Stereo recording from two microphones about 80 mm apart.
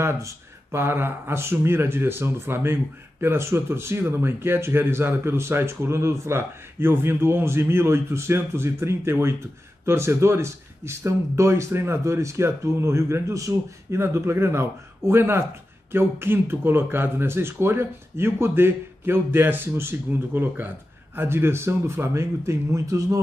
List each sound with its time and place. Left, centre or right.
0.0 s speech: right